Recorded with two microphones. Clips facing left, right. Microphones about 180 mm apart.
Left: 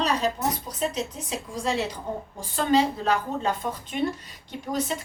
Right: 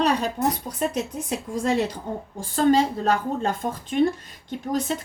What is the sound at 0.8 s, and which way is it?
A woman's voice, 55° right (ahead or behind).